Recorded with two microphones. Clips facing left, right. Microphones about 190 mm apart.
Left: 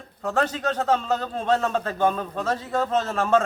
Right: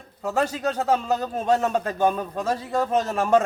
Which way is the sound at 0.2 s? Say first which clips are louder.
Even; 10° right (ahead or behind).